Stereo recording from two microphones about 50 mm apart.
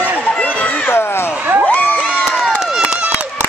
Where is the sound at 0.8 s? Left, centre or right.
Left.